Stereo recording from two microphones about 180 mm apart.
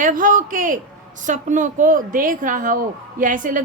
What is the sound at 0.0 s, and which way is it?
A woman's voice, 50° right (ahead or behind).